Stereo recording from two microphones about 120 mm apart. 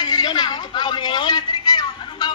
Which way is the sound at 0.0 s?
35° left (ahead or behind).